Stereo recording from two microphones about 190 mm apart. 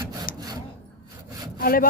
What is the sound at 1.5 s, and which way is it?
Speech, 50° left (ahead or behind).